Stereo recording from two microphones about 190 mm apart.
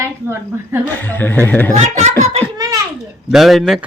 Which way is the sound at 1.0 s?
10° left (ahead or behind).